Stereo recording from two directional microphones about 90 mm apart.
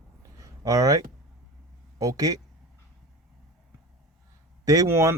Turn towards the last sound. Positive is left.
turn(degrees=-30)  # may be behind; listen again after turning